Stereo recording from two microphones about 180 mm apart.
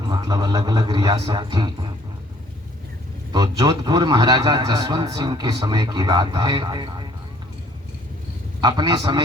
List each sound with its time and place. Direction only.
0.0 s a man's voice: 20° right (ahead or behind)
3.3 s a man's voice: 25° right (ahead or behind)
8.6 s a man's voice: 25° right (ahead or behind)